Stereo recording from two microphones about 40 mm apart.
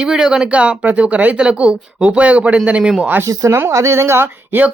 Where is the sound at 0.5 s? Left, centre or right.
Right.